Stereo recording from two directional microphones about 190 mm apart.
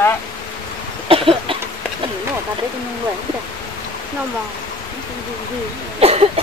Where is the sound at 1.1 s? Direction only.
30° right (ahead or behind).